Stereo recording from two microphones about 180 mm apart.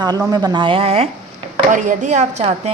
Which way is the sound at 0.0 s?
20° right (ahead or behind).